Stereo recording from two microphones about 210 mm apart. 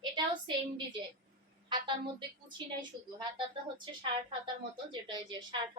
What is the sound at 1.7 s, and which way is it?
A woman's voice, 20° right (ahead or behind).